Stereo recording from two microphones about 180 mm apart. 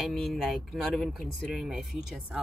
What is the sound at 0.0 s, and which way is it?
Speech, centre (ahead or behind).